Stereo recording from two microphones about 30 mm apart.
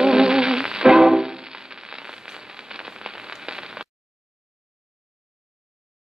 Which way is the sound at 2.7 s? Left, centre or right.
Right.